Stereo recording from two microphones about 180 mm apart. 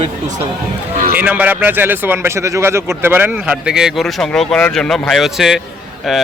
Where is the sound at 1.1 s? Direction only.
10° right (ahead or behind).